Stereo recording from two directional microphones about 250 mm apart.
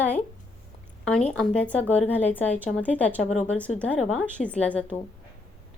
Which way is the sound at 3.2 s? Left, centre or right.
Left.